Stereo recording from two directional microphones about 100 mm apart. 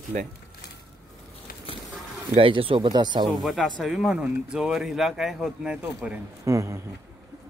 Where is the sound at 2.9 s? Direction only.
45° right (ahead or behind).